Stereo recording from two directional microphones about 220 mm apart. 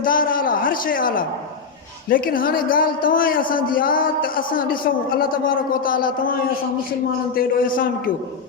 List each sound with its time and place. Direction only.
0.0 s a man's voice: 40° left (ahead or behind)
7.3 s a man's voice: 40° left (ahead or behind)